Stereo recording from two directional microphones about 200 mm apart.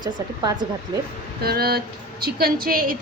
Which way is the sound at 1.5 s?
50° right (ahead or behind).